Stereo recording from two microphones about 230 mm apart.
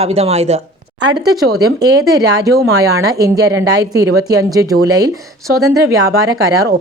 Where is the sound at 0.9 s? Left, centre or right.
Right.